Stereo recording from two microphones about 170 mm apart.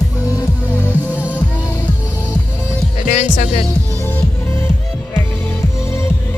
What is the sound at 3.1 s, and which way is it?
Music, 45° left (ahead or behind).